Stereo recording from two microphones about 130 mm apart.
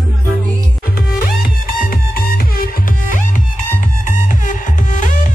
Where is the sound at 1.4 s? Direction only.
90° left.